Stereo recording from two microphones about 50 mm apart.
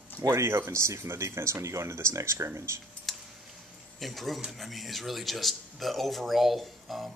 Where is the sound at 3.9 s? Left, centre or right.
Centre.